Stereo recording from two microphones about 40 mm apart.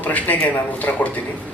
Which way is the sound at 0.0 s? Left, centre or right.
Left.